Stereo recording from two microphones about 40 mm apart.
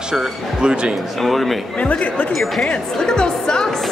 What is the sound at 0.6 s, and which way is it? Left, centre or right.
Speech, right.